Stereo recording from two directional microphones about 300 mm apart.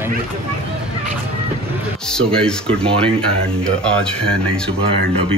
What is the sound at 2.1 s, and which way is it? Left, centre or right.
Speech, centre.